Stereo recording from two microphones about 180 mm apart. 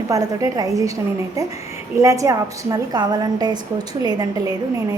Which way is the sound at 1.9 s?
20° right (ahead or behind).